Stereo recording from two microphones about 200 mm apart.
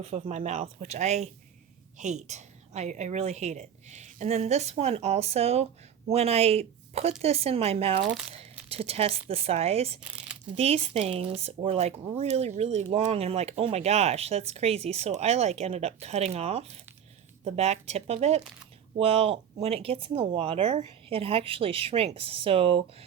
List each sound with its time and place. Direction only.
0.2 s a woman's voice: 35° right (ahead or behind)